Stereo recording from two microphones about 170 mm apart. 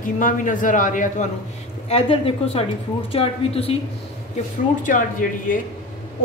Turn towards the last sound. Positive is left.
turn(degrees=50)  # may be behind; listen again after turning